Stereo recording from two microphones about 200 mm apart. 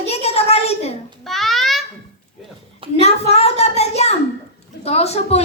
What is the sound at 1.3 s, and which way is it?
Babbling, centre (ahead or behind).